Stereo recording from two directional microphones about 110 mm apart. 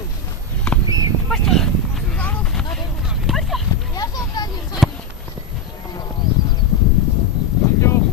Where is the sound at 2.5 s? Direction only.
10° left (ahead or behind).